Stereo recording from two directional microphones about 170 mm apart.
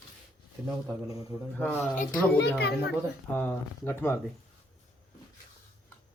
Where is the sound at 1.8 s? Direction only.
50° left (ahead or behind).